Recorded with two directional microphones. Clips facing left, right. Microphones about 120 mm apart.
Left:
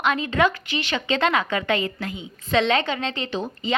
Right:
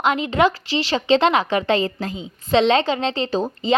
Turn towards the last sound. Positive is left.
turn(degrees=-35)  # may be behind; listen again after turning